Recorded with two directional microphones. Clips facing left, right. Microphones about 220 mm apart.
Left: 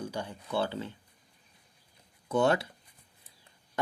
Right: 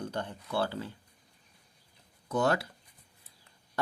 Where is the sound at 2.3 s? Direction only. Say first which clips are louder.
Left 2 dB; 25° left (ahead or behind).